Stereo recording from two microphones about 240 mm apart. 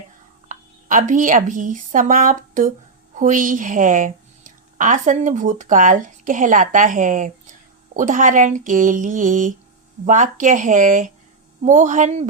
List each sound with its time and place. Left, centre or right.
0.4 s a woman's voice: right